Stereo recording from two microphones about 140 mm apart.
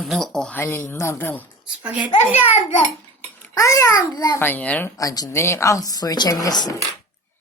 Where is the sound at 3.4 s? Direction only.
20° left (ahead or behind).